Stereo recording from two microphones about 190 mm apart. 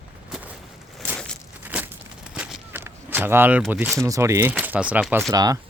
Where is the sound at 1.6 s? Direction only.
5° right (ahead or behind).